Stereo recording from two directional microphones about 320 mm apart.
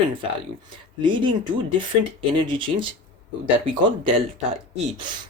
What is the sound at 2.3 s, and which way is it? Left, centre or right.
Speech, centre.